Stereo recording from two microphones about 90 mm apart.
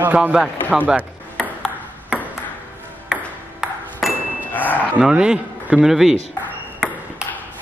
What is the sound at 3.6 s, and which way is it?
Ping, 10° right (ahead or behind).